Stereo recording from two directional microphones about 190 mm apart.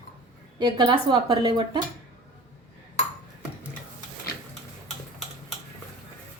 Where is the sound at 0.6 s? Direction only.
25° right (ahead or behind).